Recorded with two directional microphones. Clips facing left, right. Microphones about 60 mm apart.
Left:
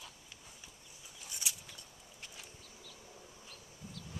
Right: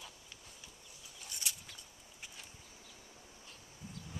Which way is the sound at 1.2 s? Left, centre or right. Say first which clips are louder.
Even; centre.